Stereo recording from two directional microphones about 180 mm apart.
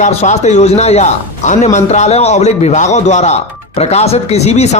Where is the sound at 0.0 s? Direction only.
40° left (ahead or behind).